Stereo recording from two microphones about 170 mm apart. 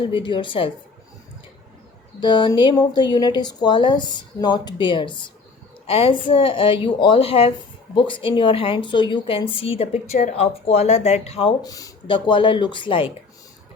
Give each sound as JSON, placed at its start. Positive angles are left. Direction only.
{"t": 0.0, "sound": "speech", "side_deg": 30}
{"t": 2.2, "sound": "a woman's voice", "side_deg": 25}
{"t": 11.6, "sound": "speech", "side_deg": 20}